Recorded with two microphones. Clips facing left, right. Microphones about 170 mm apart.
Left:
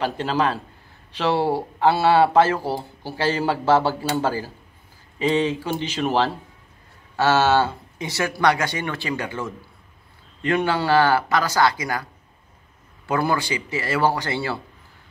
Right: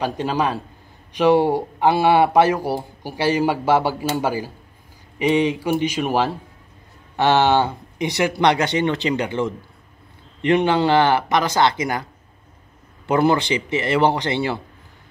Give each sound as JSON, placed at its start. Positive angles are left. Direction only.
{"t": 0.0, "sound": "speech", "side_deg": -15}